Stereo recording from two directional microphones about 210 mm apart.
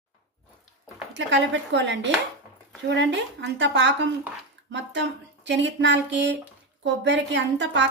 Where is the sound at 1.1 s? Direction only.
60° right (ahead or behind).